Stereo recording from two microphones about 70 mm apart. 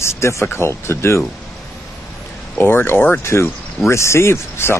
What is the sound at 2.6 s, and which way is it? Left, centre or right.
Speech, left.